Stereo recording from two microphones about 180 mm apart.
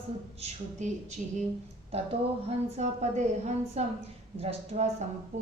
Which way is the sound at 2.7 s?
40° right (ahead or behind).